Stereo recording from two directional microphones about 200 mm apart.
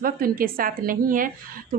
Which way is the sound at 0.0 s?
45° right (ahead or behind).